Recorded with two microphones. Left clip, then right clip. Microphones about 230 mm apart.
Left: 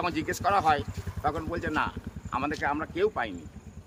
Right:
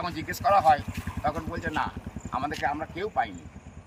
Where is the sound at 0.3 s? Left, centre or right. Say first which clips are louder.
Right 5 dB; centre.